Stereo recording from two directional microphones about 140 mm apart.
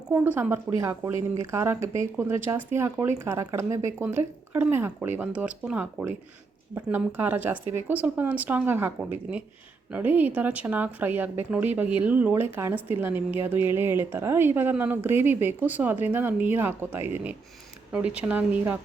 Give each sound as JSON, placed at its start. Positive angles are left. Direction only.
{"t": 0.1, "sound": "a woman's voice", "side_deg": -15}